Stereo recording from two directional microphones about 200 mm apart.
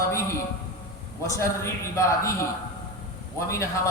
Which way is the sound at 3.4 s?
15° left (ahead or behind).